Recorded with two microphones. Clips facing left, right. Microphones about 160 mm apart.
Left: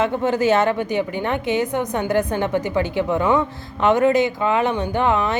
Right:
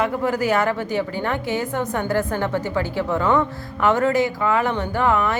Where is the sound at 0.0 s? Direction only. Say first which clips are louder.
Left 2 dB; 25° left (ahead or behind).